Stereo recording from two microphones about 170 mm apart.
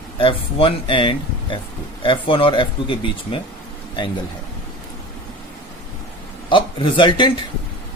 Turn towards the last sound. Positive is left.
turn(degrees=30)  # may be behind; listen again after turning